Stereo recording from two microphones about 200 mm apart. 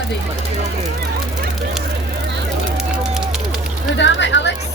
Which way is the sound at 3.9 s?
65° left (ahead or behind).